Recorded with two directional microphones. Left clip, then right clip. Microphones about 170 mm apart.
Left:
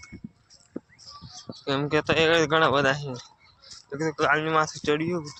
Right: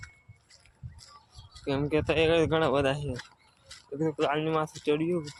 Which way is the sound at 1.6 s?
5° right (ahead or behind).